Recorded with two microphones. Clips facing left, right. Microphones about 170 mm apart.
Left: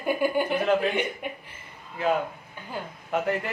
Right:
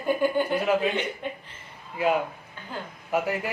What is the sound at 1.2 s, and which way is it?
Speech, 15° left (ahead or behind).